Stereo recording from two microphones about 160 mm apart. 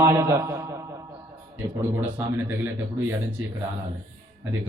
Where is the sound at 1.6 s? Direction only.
20° right (ahead or behind).